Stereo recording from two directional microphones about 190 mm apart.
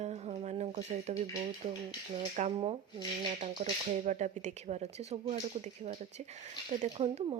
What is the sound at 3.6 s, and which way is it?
Speech, 40° right (ahead or behind).